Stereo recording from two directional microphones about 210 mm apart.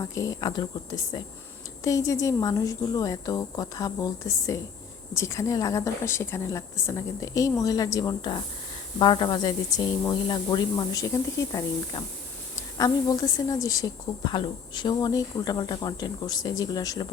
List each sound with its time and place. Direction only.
0.0 s a woman's voice: 15° left (ahead or behind)
1.8 s a woman's voice: 15° left (ahead or behind)